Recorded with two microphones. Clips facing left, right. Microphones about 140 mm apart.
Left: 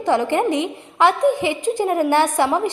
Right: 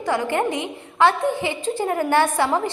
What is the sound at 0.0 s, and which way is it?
A woman's voice, 20° left (ahead or behind).